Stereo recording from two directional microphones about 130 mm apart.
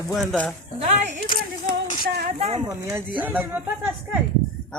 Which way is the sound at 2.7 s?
25° right (ahead or behind).